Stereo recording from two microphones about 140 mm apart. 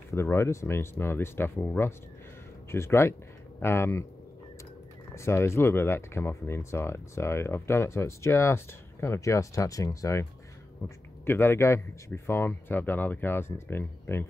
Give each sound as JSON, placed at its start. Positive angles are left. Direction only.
{"t": 0.1, "sound": "speech", "side_deg": 20}
{"t": 5.1, "sound": "speech", "side_deg": 20}
{"t": 11.2, "sound": "speech", "side_deg": 15}